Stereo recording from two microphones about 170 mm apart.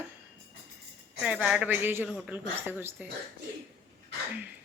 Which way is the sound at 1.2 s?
5° right (ahead or behind).